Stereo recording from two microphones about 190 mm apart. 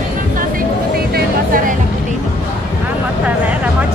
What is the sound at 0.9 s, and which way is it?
Music, 50° right (ahead or behind).